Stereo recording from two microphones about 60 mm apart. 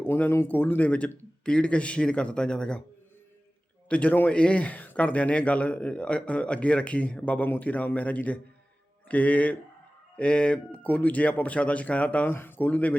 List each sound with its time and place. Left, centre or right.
0.0 s speech: left
0.4 s a man's voice: left; by 2.8 s centre
3.8 s speech: left
12.3 s speech: left